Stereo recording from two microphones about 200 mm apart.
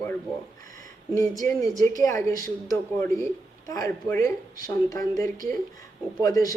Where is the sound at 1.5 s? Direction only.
15° left (ahead or behind).